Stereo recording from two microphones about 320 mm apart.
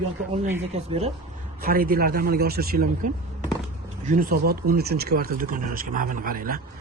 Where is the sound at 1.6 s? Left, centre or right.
Right.